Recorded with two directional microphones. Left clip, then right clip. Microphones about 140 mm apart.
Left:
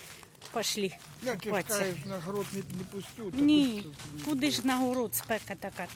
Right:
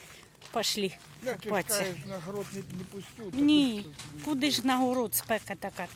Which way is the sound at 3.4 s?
35° right (ahead or behind).